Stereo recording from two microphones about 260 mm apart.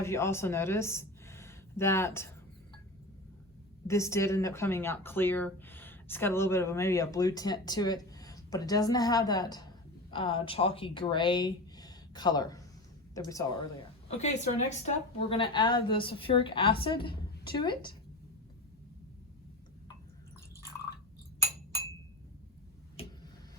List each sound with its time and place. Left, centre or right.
0.0 s speech: centre
3.8 s speech: centre
14.1 s a woman's voice: left